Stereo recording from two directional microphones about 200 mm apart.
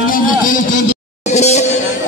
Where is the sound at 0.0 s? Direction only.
45° left (ahead or behind).